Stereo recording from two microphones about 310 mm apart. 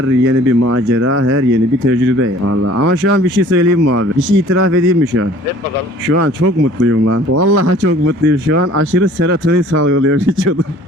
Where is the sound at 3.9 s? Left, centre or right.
Right.